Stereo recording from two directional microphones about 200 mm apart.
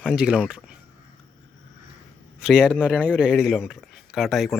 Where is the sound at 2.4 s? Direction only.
5° right (ahead or behind).